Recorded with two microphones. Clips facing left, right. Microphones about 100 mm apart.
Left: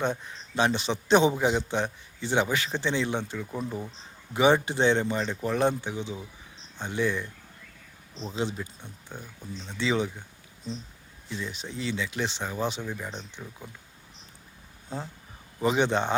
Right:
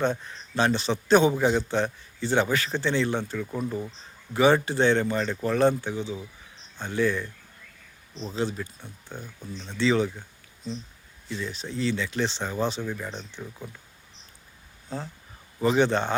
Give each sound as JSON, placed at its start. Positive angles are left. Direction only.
{"t": 0.0, "sound": "a man's voice", "side_deg": 15}
{"t": 8.3, "sound": "a man's voice", "side_deg": 15}
{"t": 11.3, "sound": "a man's voice", "side_deg": 15}
{"t": 14.8, "sound": "a man's voice", "side_deg": 10}